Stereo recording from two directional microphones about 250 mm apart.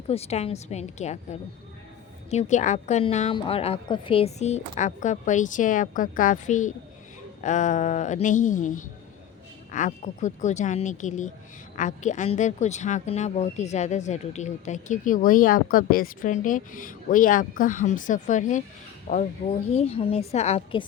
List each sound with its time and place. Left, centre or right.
0.1 s speech: left